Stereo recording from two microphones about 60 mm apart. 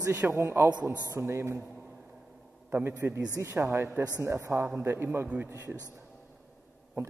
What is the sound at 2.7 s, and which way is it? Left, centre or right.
A man's voice, right.